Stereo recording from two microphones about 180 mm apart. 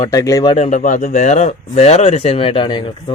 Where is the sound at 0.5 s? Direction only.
40° left (ahead or behind).